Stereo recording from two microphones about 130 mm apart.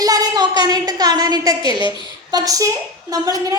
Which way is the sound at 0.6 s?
30° right (ahead or behind).